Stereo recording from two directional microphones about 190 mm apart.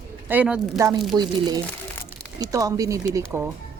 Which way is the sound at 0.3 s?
5° right (ahead or behind).